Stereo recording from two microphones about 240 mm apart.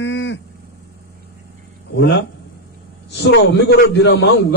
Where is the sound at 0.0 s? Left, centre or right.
Left.